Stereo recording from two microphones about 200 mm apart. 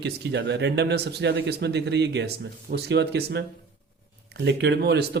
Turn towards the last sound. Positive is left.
turn(degrees=-55)  # may be behind; listen again after turning